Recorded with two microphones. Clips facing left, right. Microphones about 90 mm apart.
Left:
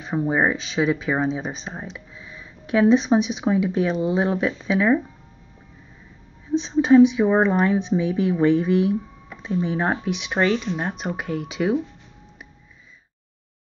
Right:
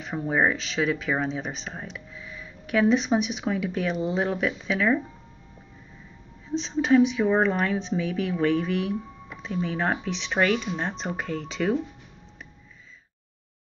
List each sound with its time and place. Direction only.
0.0 s speech: 20° left (ahead or behind)
6.5 s speech: 15° left (ahead or behind)